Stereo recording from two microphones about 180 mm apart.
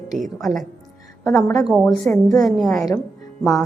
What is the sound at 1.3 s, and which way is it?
Speech, 15° left (ahead or behind).